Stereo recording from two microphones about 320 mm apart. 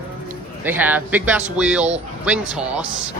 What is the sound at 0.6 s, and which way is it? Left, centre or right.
Speech, centre.